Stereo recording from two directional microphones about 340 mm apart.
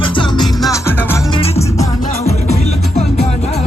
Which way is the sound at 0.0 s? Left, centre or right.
Centre.